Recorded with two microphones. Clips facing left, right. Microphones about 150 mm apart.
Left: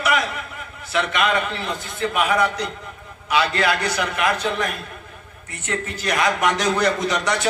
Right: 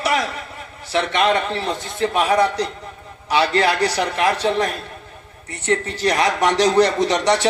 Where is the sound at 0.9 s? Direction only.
30° right (ahead or behind).